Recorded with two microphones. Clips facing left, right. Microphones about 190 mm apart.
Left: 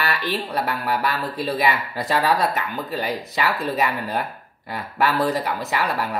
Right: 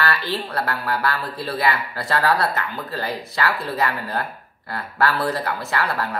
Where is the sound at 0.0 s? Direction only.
20° left (ahead or behind).